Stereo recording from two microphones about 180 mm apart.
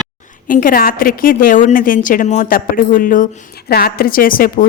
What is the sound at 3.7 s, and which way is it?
Speech, 60° left (ahead or behind).